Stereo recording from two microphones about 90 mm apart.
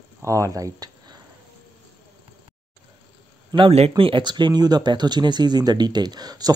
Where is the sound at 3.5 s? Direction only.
75° right (ahead or behind).